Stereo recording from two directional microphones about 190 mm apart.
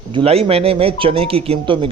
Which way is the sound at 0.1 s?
30° right (ahead or behind).